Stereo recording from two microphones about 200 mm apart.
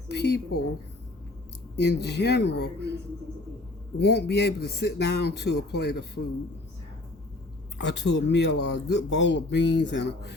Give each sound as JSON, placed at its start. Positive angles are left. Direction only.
{"t": 0.1, "sound": "a sound", "side_deg": 55}
{"t": 1.7, "sound": "speech", "side_deg": 55}
{"t": 4.0, "sound": "speech", "side_deg": 55}
{"t": 7.8, "sound": "speech", "side_deg": 60}